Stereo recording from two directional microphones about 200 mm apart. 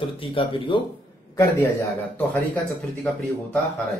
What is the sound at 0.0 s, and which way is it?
Speech, 25° left (ahead or behind).